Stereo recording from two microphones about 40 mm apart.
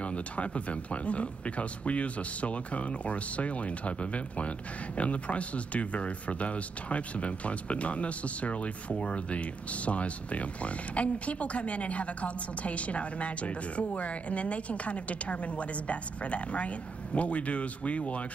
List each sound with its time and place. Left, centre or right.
0.0 s speech: left